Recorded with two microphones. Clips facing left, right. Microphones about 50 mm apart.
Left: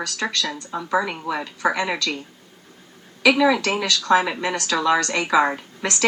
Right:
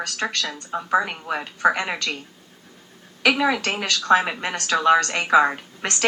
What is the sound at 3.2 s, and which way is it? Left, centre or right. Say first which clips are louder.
A woman's voice: left 3 dB; right.